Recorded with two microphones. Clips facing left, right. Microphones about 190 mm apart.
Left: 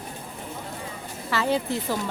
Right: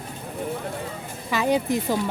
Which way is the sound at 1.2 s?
15° right (ahead or behind).